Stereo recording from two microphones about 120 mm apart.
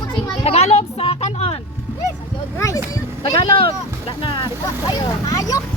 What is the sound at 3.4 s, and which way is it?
Speech, 50° left (ahead or behind).